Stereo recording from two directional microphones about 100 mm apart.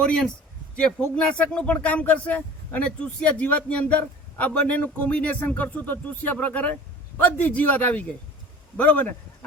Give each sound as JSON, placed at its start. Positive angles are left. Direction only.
{"t": 0.0, "sound": "speech", "side_deg": 10}